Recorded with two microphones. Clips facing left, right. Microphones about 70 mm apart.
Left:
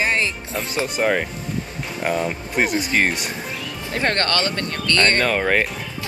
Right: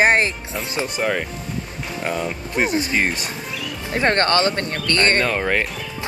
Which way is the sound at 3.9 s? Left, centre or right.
Right.